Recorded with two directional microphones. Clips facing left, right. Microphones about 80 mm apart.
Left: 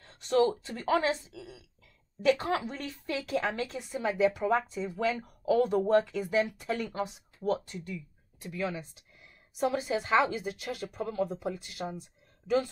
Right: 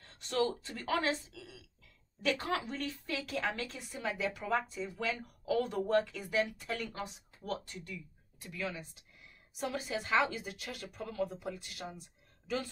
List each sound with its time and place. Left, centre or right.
0.3 s speech: left